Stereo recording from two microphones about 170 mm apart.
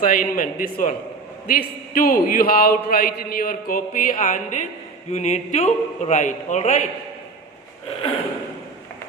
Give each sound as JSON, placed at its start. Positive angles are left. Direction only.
{"t": 0.0, "sound": "a man's voice", "side_deg": 55}